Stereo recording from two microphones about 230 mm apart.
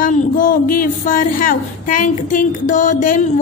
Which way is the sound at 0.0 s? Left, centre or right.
Left.